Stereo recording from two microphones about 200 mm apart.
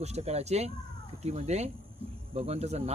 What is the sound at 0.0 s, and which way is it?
A man's voice, 35° right (ahead or behind).